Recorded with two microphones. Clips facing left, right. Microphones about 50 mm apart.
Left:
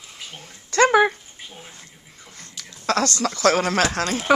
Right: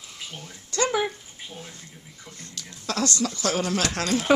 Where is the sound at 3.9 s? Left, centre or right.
Left.